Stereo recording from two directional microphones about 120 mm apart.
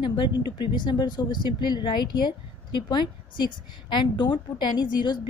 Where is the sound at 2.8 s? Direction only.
35° left (ahead or behind).